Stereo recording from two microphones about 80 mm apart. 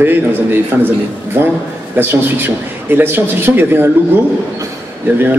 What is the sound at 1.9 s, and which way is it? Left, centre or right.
A man's voice, right.